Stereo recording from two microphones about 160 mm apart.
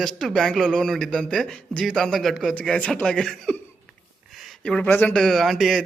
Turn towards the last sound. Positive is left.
turn(degrees=0)  # may be behind; listen again after turning